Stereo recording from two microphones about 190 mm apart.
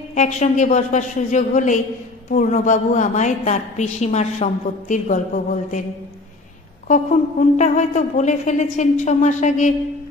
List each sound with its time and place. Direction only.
0.1 s a woman's voice: 40° left (ahead or behind)
6.9 s a woman's voice: 40° left (ahead or behind)